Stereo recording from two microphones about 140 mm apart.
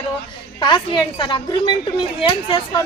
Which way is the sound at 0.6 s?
35° left (ahead or behind).